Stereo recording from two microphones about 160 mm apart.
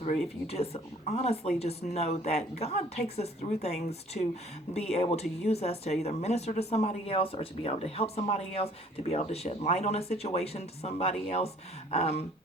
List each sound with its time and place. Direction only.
0.4 s speech: 40° left (ahead or behind)